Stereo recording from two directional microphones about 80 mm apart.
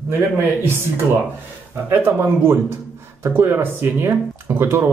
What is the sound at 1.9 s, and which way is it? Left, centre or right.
Speech, right.